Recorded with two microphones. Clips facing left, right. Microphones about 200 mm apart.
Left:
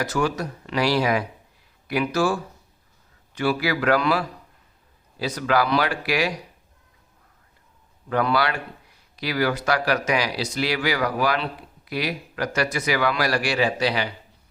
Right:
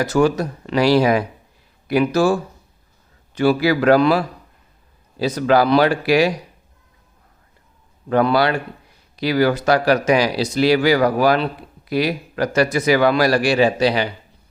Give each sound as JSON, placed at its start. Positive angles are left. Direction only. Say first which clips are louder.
{"t": 0.0, "sound": "speech", "louder": "right 7 dB", "side_deg": -30}
{"t": 8.1, "sound": "speech", "louder": "right 6 dB", "side_deg": -30}